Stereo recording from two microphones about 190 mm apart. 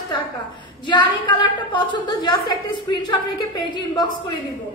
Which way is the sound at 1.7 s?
25° left (ahead or behind).